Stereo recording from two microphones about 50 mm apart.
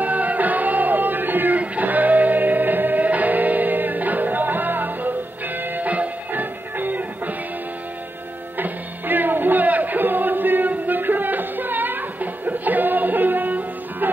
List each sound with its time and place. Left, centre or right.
0.0 s music: right
8.5 s music: right